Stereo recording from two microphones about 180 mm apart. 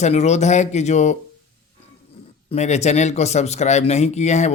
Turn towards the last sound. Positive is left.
turn(degrees=40)  # may be behind; listen again after turning